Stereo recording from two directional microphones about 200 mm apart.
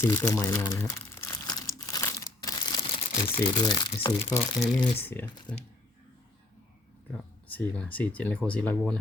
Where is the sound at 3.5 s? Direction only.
20° left (ahead or behind).